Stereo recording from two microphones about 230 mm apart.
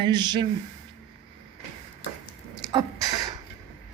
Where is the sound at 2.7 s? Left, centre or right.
Centre.